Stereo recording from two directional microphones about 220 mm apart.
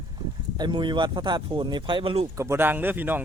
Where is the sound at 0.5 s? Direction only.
20° right (ahead or behind).